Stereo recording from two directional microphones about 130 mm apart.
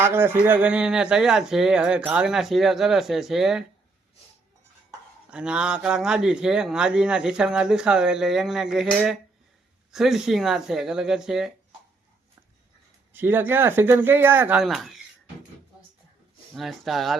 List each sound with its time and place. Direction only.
0.0 s speech: 15° right (ahead or behind)
5.3 s speech: 5° right (ahead or behind)
9.9 s speech: 5° right (ahead or behind)
13.1 s speech: 15° right (ahead or behind)
14.6 s speech: centre (ahead or behind)
16.6 s speech: centre (ahead or behind)